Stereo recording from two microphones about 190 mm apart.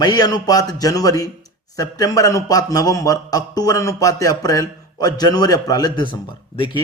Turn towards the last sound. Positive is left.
turn(degrees=25)  # may be behind; listen again after turning